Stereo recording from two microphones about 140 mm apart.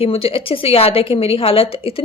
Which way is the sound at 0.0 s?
45° left (ahead or behind).